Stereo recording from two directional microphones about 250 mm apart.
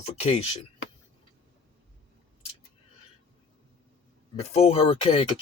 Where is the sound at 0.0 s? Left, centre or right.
Left.